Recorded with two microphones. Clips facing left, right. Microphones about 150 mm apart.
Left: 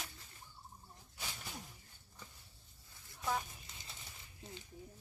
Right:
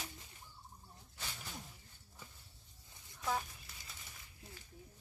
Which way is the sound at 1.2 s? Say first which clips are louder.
Left 1 dB; 10° left (ahead or behind).